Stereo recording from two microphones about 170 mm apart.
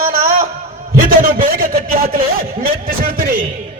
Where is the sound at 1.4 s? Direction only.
60° right (ahead or behind).